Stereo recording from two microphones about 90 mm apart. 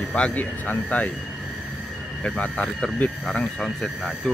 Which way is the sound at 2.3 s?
10° left (ahead or behind).